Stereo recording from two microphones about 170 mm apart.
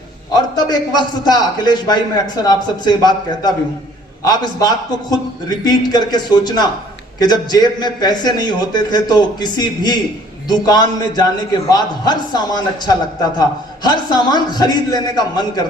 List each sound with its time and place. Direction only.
0.5 s a man's voice: 25° left (ahead or behind)